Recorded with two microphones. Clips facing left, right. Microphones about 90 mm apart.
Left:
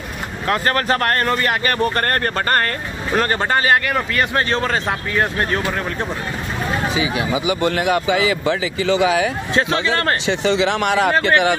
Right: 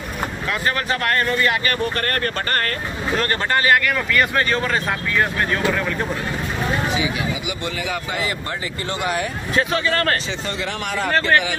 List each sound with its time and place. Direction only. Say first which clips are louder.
0.5 s speech: left 6 dB; 45° left (ahead or behind)
7.6 s a man's voice: left 10 dB; 65° left (ahead or behind); by 9.3 s 90° left
9.6 s speech: left 1 dB; 25° left (ahead or behind)
10.2 s speech: left 9 dB; 80° left; by 11.5 s 65° left (ahead or behind)